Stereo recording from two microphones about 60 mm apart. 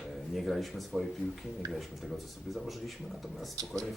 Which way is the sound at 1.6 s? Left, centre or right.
Right.